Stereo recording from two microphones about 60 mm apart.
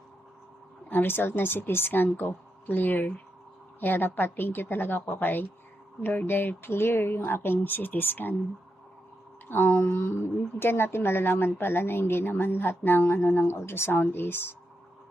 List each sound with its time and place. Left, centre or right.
0.9 s a woman's voice: left
9.6 s mantra: left
10.6 s a woman's voice: left